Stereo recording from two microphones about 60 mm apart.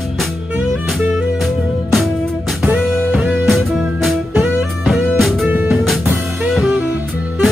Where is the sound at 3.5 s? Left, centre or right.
Centre.